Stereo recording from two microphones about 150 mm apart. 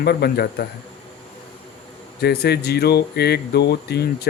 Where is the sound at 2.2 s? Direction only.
90° left.